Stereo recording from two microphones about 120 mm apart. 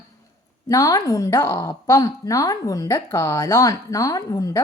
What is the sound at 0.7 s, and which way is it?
A woman's voice, 30° left (ahead or behind).